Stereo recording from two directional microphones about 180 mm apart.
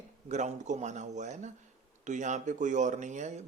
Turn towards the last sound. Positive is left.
turn(degrees=-40)  # may be behind; listen again after turning